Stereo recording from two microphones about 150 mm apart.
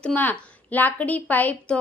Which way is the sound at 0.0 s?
10° left (ahead or behind).